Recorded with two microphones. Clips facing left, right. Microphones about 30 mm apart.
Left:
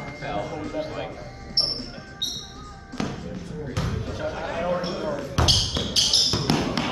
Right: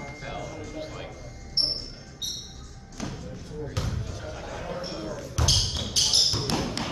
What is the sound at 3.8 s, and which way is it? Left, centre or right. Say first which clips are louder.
Basketball bounce: left 6 dB; left.